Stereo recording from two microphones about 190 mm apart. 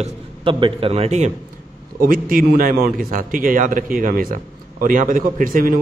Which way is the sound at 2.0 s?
50° right (ahead or behind).